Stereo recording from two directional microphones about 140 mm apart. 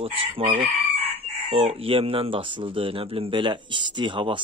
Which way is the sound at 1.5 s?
40° right (ahead or behind).